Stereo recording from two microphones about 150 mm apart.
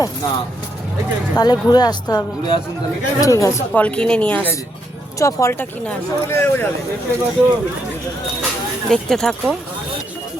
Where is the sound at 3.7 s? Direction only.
10° left (ahead or behind).